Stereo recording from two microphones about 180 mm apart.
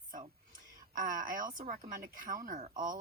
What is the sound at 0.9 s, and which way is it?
Speech, 50° right (ahead or behind).